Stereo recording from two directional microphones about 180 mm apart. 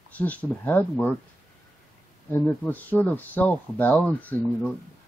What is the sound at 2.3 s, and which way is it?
Speech, 10° left (ahead or behind).